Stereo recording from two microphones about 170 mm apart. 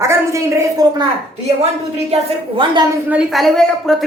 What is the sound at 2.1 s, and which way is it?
Speech, 30° right (ahead or behind).